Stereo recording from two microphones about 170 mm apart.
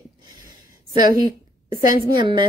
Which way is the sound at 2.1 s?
30° right (ahead or behind).